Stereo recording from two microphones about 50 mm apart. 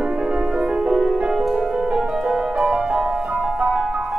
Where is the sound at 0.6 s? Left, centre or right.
Centre.